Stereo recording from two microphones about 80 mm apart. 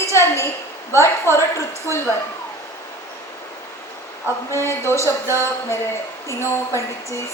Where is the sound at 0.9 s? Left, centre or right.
Left.